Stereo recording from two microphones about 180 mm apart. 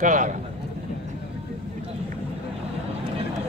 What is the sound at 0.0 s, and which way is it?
Speech, 45° right (ahead or behind).